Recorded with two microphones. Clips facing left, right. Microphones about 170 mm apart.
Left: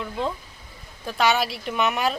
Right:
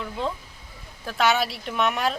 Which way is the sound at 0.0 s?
Centre (ahead or behind).